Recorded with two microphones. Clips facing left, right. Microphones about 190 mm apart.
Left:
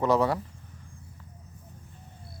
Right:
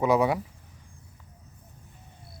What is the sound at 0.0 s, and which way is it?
Speech, 10° right (ahead or behind).